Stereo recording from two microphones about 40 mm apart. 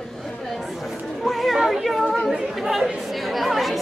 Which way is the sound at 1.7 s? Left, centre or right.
Centre.